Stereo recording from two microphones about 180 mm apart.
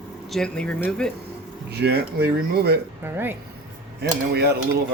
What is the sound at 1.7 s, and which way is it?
Speech, 65° right (ahead or behind).